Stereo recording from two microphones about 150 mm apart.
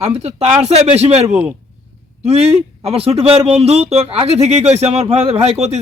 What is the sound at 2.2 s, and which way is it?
A man's voice, 40° right (ahead or behind).